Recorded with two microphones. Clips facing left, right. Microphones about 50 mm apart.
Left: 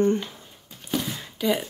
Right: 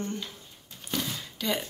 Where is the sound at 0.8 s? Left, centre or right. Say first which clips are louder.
Left 4 dB; centre.